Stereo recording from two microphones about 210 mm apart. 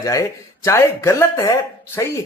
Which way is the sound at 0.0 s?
15° left (ahead or behind).